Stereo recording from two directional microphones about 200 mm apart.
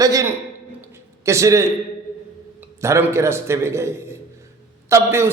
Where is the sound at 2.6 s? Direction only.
10° right (ahead or behind).